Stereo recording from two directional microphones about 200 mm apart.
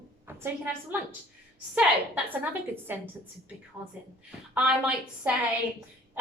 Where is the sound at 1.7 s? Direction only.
10° right (ahead or behind).